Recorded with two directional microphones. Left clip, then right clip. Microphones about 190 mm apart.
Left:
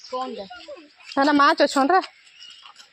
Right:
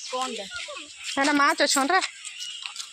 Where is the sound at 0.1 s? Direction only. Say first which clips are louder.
Left 1 dB; 40° left (ahead or behind).